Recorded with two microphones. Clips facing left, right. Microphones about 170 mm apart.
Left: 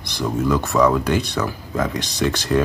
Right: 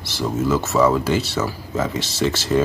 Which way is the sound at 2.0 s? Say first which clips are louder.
Even; 15° left (ahead or behind).